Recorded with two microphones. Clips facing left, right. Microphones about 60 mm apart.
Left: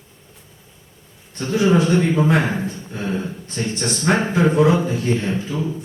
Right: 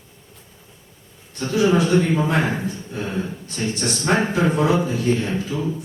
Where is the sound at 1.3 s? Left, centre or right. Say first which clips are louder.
Left 1 dB; left.